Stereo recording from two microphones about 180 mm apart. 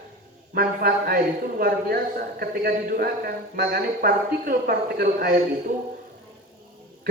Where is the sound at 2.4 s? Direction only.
55° right (ahead or behind).